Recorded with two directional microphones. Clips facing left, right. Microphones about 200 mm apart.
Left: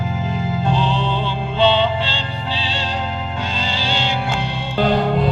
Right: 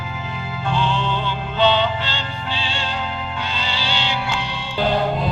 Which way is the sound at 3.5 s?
45° left (ahead or behind).